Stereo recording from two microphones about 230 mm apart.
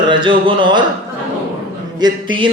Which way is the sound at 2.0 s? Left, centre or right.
Centre.